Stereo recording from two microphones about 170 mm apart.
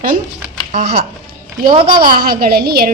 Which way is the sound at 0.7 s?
50° right (ahead or behind).